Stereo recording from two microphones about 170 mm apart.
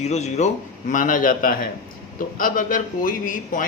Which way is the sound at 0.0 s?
40° left (ahead or behind).